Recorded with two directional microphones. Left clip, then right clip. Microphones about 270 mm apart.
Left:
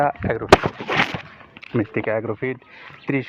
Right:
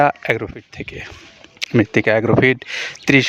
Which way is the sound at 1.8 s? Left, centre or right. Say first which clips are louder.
Right 7 dB; right.